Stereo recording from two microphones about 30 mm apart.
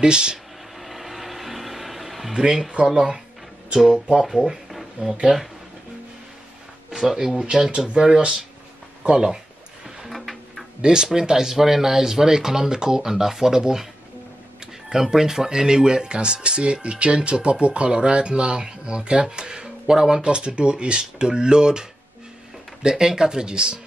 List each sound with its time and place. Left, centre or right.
0.0 s speech: right
0.7 s a sound: centre
2.3 s speech: right
4.2 s speech: centre
7.0 s speech: centre
10.0 s a sound: centre
10.8 s speech: right
15.0 s speech: centre
20.2 s speech: right